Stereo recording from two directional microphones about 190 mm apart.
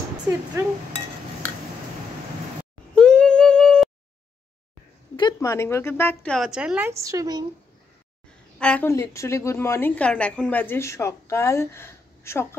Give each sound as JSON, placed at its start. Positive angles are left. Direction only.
{"t": 2.9, "sound": "a sound", "side_deg": 5}
{"t": 5.1, "sound": "a woman's voice", "side_deg": 20}
{"t": 6.9, "sound": "a woman's voice", "side_deg": -15}
{"t": 8.5, "sound": "a woman's voice", "side_deg": 5}